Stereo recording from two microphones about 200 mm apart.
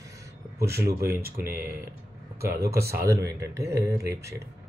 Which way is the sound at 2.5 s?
15° right (ahead or behind).